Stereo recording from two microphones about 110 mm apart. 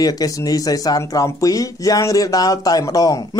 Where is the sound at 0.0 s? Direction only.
35° left (ahead or behind).